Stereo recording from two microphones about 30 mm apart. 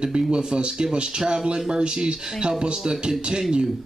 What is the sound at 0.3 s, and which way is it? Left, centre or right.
A man's voice, right.